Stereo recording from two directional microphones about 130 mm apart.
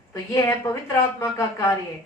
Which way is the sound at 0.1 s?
25° left (ahead or behind).